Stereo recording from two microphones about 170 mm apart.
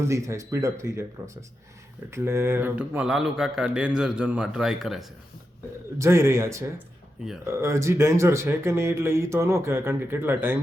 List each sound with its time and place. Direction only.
0.0 s speech: 15° right (ahead or behind)
6.0 s speech: 15° right (ahead or behind)